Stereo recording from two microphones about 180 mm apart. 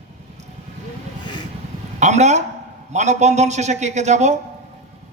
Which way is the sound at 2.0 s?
40° right (ahead or behind).